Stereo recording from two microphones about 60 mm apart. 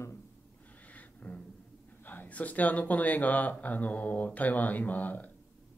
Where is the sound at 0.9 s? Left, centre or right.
Left.